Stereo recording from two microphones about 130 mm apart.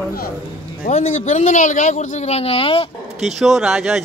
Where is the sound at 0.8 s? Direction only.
60° left (ahead or behind); by 2.8 s 45° left (ahead or behind).